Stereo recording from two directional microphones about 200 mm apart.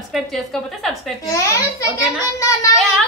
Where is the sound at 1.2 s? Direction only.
15° left (ahead or behind).